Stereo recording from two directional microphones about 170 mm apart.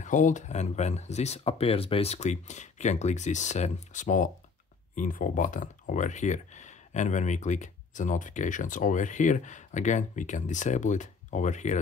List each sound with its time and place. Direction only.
0.0 s speech: 45° left (ahead or behind)